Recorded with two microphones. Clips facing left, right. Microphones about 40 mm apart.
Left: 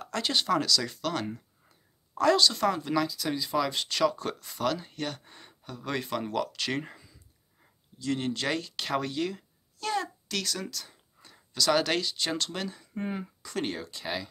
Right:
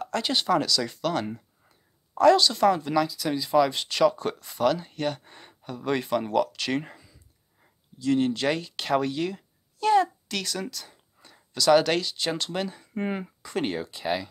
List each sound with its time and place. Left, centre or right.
0.0 s speech: centre
5.3 s speech: right; by 9.4 s centre
9.8 s a child's voice: centre
12.9 s speech: right
13.4 s speech: centre